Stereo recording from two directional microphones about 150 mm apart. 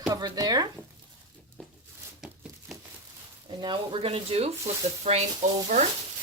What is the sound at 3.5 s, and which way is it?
Speech, 30° right (ahead or behind).